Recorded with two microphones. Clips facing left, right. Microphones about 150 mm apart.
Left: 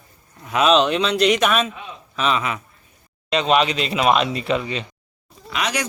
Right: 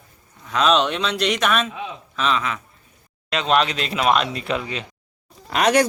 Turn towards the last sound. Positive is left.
turn(degrees=-45)  # may be behind; listen again after turning